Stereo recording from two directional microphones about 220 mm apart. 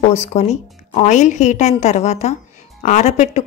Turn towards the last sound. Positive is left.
turn(degrees=30)  # may be behind; listen again after turning